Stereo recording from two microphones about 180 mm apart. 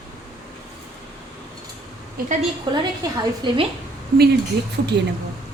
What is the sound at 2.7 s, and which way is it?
Speech, 25° right (ahead or behind).